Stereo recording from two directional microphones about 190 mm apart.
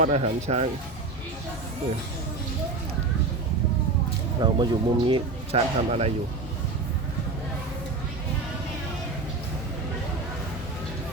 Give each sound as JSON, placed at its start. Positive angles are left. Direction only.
{"t": 0.0, "sound": "speech", "side_deg": -35}
{"t": 4.4, "sound": "speech", "side_deg": -25}